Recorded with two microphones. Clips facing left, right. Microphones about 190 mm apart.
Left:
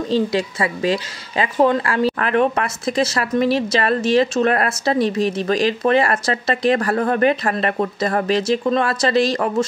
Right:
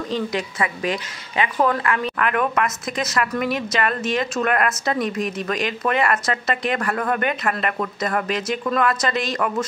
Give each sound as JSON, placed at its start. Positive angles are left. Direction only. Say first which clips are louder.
{"t": 0.1, "sound": "speech", "louder": "left 7 dB", "side_deg": 30}